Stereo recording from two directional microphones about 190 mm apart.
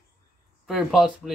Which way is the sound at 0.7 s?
Centre (ahead or behind).